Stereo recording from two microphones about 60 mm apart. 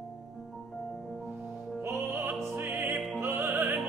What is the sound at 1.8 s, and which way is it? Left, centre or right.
Music, right.